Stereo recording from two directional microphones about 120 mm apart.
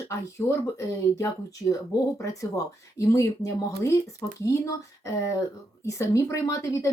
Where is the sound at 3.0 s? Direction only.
25° left (ahead or behind).